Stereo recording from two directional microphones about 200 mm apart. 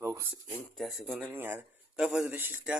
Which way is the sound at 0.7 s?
Centre (ahead or behind).